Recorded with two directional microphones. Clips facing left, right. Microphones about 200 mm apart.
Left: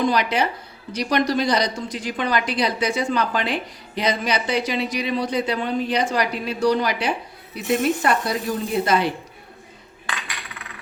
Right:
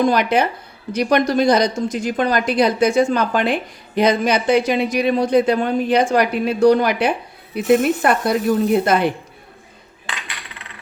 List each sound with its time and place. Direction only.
0.0 s a woman's voice: 50° right (ahead or behind)